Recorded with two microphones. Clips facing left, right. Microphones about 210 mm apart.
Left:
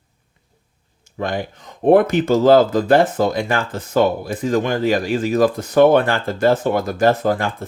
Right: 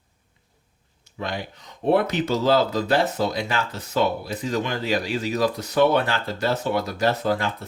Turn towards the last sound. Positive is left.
turn(degrees=50)  # may be behind; listen again after turning